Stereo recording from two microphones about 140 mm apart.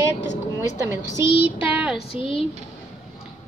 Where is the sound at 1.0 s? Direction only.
30° left (ahead or behind).